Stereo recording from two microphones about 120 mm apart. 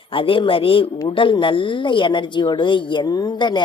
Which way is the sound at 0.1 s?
45° left (ahead or behind).